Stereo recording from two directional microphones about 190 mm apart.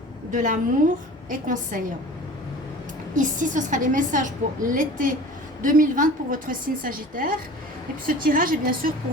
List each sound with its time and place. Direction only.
0.3 s a woman's voice: 40° right (ahead or behind)
3.2 s a woman's voice: 40° right (ahead or behind)